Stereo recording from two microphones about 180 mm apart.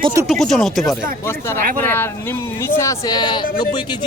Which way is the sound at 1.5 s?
50° right (ahead or behind).